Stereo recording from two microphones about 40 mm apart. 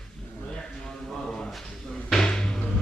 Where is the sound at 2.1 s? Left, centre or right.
Centre.